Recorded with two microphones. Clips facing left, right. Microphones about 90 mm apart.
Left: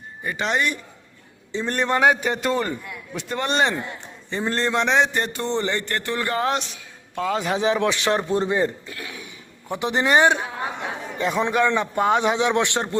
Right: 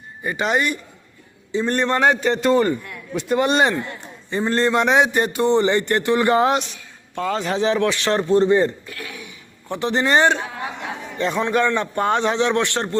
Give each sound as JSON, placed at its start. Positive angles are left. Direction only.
{"t": 0.3, "sound": "a man's voice", "side_deg": -5}
{"t": 6.5, "sound": "a man's voice", "side_deg": 0}
{"t": 8.9, "sound": "a sound", "side_deg": 25}
{"t": 9.6, "sound": "a man's voice", "side_deg": 10}